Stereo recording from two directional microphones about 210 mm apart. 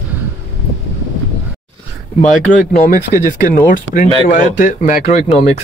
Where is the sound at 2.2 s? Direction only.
40° left (ahead or behind).